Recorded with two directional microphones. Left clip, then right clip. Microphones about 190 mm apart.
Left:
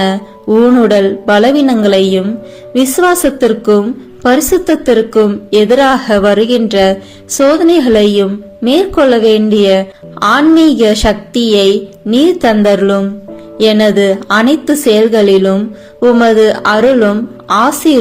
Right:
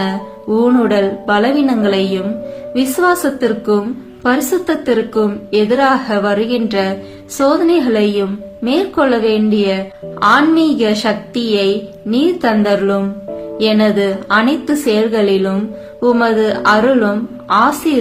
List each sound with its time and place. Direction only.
0.0 s a woman's voice: 40° left (ahead or behind)